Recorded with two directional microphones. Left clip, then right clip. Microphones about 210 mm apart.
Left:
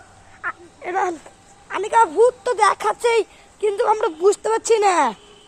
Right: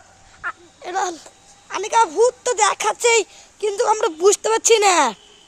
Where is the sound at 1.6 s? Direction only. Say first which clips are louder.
Left 1 dB; 25° right (ahead or behind).